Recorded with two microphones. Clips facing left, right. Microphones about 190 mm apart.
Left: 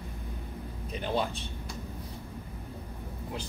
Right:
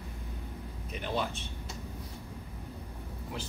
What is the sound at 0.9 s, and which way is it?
Speech, 35° left (ahead or behind).